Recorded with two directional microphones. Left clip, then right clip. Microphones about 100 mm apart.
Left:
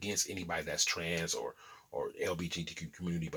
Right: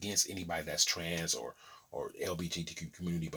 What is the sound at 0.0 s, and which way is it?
Speech, 15° right (ahead or behind).